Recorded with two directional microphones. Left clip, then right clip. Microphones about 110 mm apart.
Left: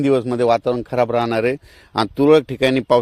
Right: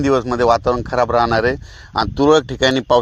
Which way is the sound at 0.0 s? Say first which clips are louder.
Right 2 dB; 20° left (ahead or behind).